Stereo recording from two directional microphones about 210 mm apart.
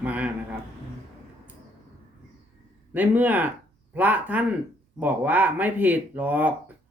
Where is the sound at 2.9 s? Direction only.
10° right (ahead or behind).